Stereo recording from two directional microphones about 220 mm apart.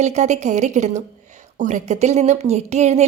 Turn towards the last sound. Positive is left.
turn(degrees=-30)  # may be behind; listen again after turning